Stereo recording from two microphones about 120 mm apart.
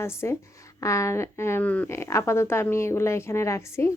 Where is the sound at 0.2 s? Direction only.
20° left (ahead or behind).